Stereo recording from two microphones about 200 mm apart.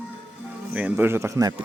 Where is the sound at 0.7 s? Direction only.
10° right (ahead or behind).